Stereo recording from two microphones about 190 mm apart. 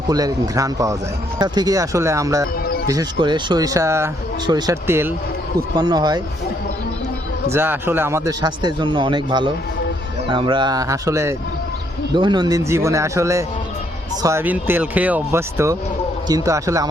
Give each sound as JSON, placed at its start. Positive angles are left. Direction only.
{"t": 0.1, "sound": "a man's voice", "side_deg": -20}
{"t": 7.5, "sound": "a man's voice", "side_deg": -10}